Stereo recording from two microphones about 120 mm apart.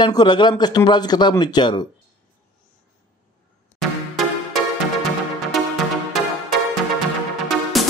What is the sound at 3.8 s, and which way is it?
Music, centre (ahead or behind).